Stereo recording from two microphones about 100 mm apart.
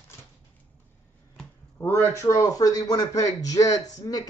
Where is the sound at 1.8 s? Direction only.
20° left (ahead or behind).